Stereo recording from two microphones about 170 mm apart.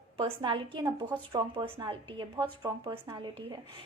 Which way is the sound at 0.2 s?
30° right (ahead or behind).